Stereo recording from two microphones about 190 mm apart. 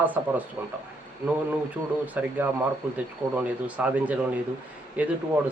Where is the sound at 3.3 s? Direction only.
10° right (ahead or behind).